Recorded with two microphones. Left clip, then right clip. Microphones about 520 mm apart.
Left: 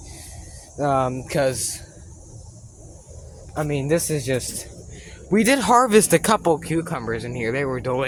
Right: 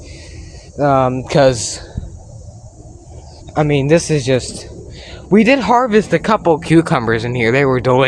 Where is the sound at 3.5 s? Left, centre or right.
Left.